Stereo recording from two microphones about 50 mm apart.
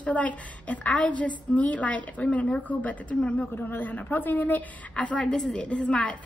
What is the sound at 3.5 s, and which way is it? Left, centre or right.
A woman's voice, left.